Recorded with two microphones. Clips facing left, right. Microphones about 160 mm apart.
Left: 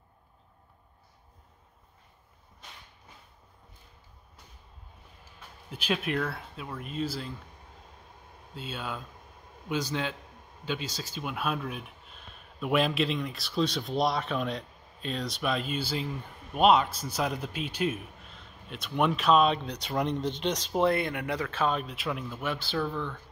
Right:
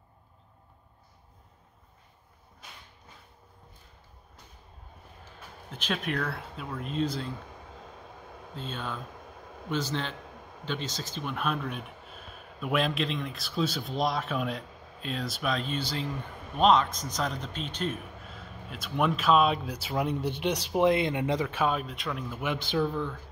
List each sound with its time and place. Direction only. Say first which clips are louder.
5.7 s speech: left 2 dB; 10° left (ahead or behind)
7.4 s vehicle: right 7 dB; 90° right
8.7 s speech: left 1 dB; 10° left (ahead or behind)
9.1 s a sound: right 6 dB; 90° right
9.7 s speech: even; 10° left (ahead or behind)
10.2 s a sound: right 6 dB; 90° right
10.6 s speech: even; 10° left (ahead or behind)
14.7 s a sound: right 6 dB; 90° right
15.0 s speech: left 1 dB; centre (ahead or behind)
17.9 s a sound: right 1 dB; 80° right
18.7 s speech: left 1 dB; centre (ahead or behind)
22.3 s speech: right 2 dB; 15° right (ahead or behind)